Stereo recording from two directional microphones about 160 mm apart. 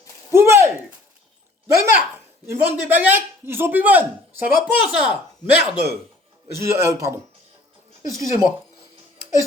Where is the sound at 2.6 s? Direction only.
10° right (ahead or behind).